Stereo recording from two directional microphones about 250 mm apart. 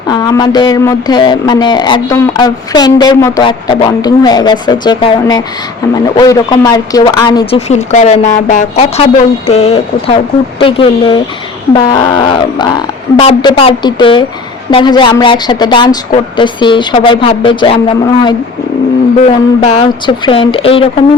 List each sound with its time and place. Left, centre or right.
0.1 s a woman's voice: centre